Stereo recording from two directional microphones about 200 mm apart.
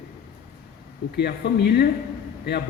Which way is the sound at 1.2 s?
55° left (ahead or behind).